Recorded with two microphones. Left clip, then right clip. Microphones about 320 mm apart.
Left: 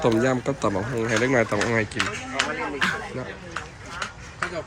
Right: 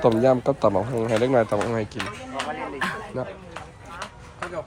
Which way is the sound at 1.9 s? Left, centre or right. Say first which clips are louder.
Left 5 dB; right.